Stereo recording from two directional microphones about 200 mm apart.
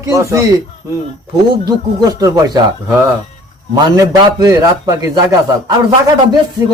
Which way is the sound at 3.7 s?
20° right (ahead or behind).